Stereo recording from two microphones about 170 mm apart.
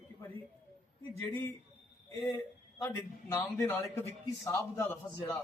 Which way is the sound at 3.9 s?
15° left (ahead or behind).